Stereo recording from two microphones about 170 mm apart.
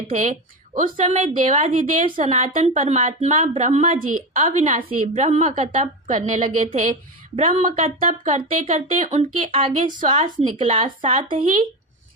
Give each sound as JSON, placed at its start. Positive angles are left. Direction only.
{"t": 0.1, "sound": "a woman's voice", "side_deg": -50}
{"t": 4.4, "sound": "a woman's voice", "side_deg": -40}